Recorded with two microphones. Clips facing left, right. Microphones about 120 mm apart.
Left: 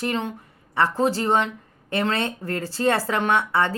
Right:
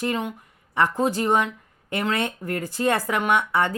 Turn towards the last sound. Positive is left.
turn(degrees=-15)  # may be behind; listen again after turning